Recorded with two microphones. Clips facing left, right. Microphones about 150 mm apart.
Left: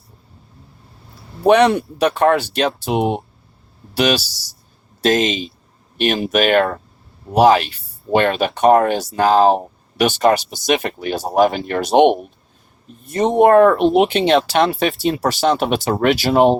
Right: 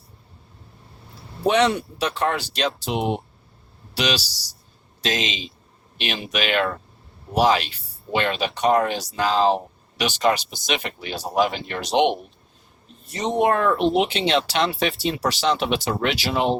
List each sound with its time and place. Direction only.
1.5 s speech: 60° left (ahead or behind)